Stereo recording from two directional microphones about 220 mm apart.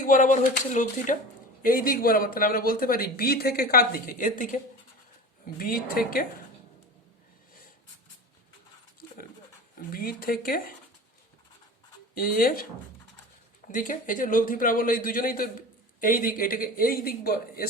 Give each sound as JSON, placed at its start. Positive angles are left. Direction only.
{"t": 0.0, "sound": "speech", "side_deg": 35}
{"t": 9.0, "sound": "pant", "side_deg": 45}
{"t": 9.7, "sound": "speech", "side_deg": 40}
{"t": 12.1, "sound": "speech", "side_deg": 40}
{"t": 13.7, "sound": "speech", "side_deg": 35}